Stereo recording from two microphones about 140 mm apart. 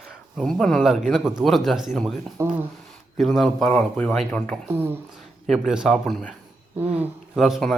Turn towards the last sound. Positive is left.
turn(degrees=0)  # may be behind; listen again after turning